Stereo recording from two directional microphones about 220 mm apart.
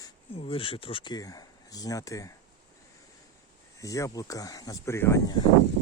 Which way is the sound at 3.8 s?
15° left (ahead or behind).